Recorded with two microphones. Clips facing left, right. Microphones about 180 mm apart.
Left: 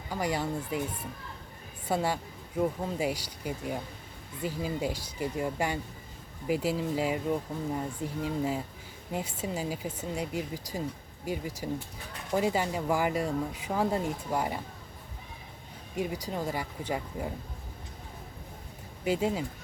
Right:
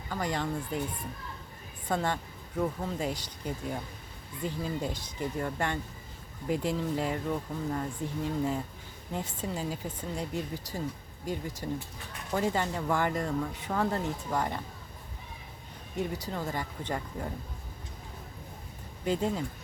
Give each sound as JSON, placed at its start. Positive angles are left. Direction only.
{"t": 0.1, "sound": "speech", "side_deg": 10}
{"t": 16.0, "sound": "speech", "side_deg": 10}
{"t": 19.0, "sound": "speech", "side_deg": 10}